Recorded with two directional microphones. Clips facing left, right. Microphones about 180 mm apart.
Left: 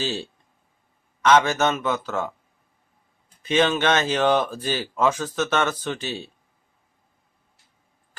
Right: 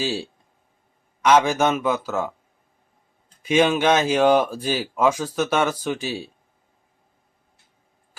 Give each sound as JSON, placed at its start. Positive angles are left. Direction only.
{"t": 0.0, "sound": "speech", "side_deg": -10}
{"t": 3.4, "sound": "speech", "side_deg": -10}